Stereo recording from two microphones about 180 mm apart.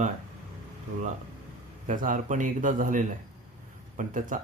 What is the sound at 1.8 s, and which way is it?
Speech, 50° right (ahead or behind).